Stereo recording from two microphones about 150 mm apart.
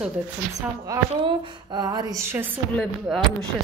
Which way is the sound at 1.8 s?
25° right (ahead or behind).